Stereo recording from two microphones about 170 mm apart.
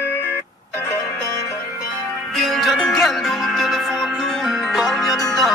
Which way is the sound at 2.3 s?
Centre (ahead or behind).